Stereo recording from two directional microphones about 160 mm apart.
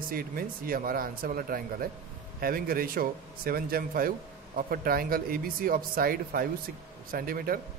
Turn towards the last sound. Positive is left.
turn(degrees=-65)  # may be behind; listen again after turning